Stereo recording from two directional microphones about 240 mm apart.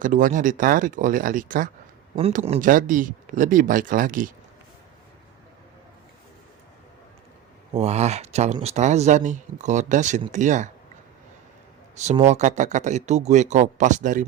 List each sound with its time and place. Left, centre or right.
0.0 s speech: right
7.7 s speech: right
11.9 s speech: right